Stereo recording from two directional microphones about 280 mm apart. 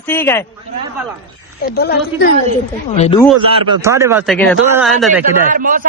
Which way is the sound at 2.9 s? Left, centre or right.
Left.